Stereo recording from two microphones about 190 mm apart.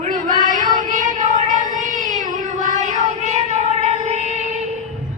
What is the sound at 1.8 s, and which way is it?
Child singing, 45° right (ahead or behind).